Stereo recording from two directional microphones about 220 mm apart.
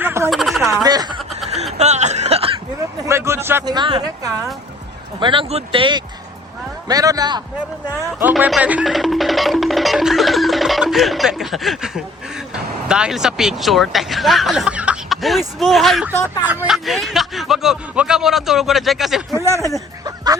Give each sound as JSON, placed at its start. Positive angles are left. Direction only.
{"t": 0.0, "sound": "a sound", "side_deg": -10}
{"t": 0.3, "sound": "a sound", "side_deg": 0}
{"t": 0.7, "sound": "speech", "side_deg": -15}
{"t": 1.8, "sound": "chuckle", "side_deg": -30}
{"t": 3.1, "sound": "speech", "side_deg": -10}
{"t": 8.2, "sound": "speech", "side_deg": -5}
{"t": 19.3, "sound": "speech", "side_deg": -15}